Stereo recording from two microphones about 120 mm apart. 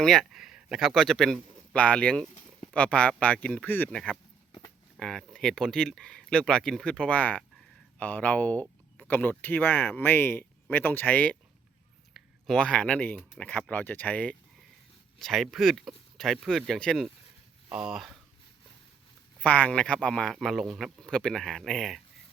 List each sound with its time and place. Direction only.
0.0 s a man's voice: 5° left (ahead or behind)
9.0 s a sound: 15° left (ahead or behind)
9.4 s a man's voice: 15° left (ahead or behind)
17.7 s speech: 5° right (ahead or behind)
19.4 s a man's voice: 10° left (ahead or behind)